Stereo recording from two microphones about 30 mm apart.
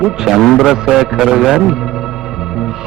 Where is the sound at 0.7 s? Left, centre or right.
Centre.